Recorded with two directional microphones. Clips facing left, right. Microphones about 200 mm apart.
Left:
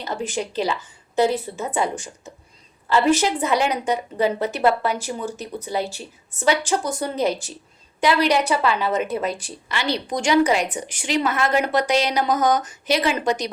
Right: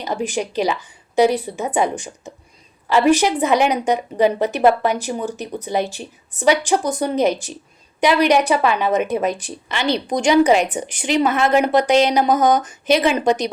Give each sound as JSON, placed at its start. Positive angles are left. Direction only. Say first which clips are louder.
{"t": 0.0, "sound": "a woman's voice", "louder": "right 4 dB", "side_deg": -15}